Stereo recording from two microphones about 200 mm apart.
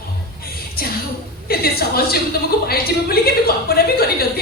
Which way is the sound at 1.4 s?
50° left (ahead or behind).